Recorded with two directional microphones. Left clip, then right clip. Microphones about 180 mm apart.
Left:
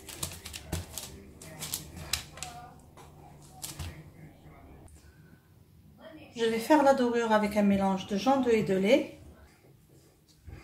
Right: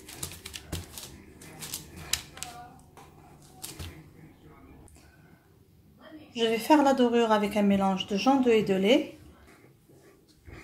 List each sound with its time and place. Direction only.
6.3 s a woman's voice: 30° right (ahead or behind)